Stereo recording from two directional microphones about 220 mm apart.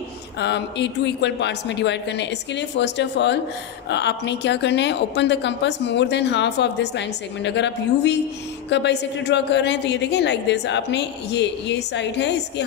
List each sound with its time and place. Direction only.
0.4 s speech: 50° left (ahead or behind)